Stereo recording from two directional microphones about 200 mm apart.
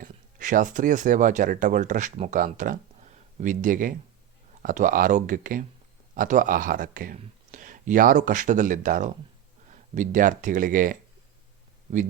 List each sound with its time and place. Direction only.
0.0 s speech: 40° right (ahead or behind)